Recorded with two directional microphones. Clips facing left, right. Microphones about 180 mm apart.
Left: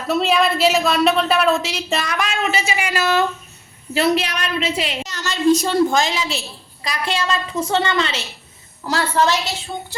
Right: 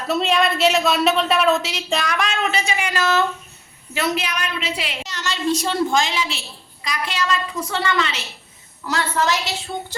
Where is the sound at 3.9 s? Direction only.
35° left (ahead or behind).